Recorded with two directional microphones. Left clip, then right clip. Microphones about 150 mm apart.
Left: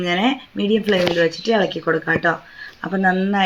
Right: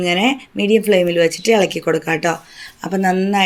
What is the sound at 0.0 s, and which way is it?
Speech, 35° right (ahead or behind).